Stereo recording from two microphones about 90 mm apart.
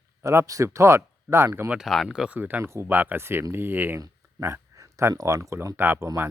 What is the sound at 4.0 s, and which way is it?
Speech, 35° right (ahead or behind).